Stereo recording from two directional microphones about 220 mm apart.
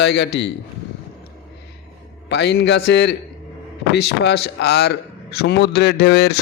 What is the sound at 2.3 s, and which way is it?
A man's voice, 50° left (ahead or behind).